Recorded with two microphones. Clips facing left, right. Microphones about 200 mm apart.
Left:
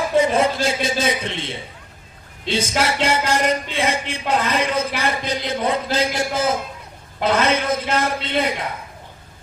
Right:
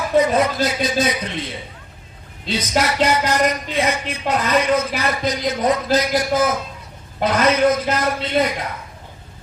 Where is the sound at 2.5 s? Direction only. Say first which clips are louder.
Even; 30° left (ahead or behind).